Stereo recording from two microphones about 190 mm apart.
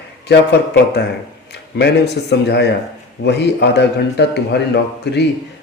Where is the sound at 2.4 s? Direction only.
60° left (ahead or behind).